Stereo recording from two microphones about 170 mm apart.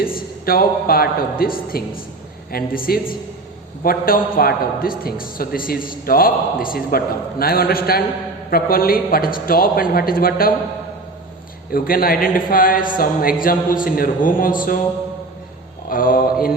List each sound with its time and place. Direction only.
0.0 s a man's voice: 60° left (ahead or behind)
11.7 s a man's voice: 60° left (ahead or behind)
15.9 s a sound: 55° left (ahead or behind)